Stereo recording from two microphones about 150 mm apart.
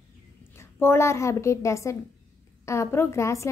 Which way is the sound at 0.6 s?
15° left (ahead or behind).